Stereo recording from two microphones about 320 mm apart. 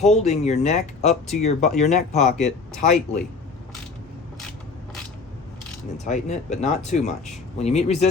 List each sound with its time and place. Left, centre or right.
0.0 s speech: left
6.1 s speech: left